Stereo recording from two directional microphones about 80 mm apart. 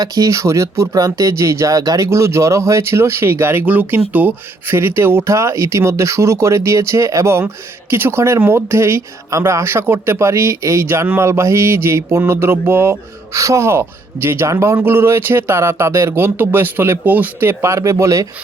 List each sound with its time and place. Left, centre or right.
0.0 s speech: right
17.5 s speech: right